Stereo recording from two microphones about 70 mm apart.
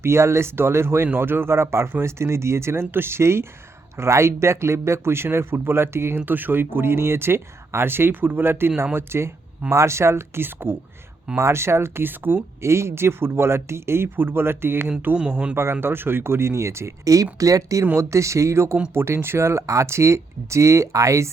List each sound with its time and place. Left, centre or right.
0.0 s speech: right
14.8 s speech: centre
15.5 s speech: right